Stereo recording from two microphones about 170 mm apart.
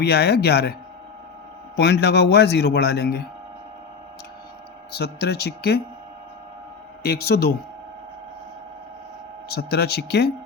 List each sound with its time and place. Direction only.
0.0 s speech: 75° left (ahead or behind)
1.7 s a man's voice: 90° left
4.9 s speech: 75° left (ahead or behind)
7.0 s speech: 65° left (ahead or behind)
9.5 s speech: 65° left (ahead or behind)